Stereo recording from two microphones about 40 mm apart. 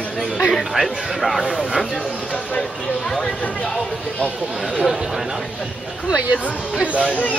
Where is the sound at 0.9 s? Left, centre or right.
Right.